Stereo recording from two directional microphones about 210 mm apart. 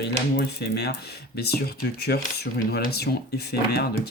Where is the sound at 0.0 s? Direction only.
50° left (ahead or behind).